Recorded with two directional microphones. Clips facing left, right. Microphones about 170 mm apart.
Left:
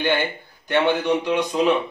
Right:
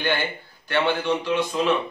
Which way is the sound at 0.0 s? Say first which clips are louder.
Left 3 dB; 20° left (ahead or behind).